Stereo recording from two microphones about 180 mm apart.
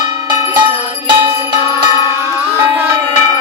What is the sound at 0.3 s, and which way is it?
Music, 20° right (ahead or behind).